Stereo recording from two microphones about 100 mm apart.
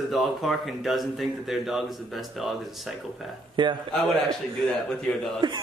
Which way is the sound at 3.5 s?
50° right (ahead or behind).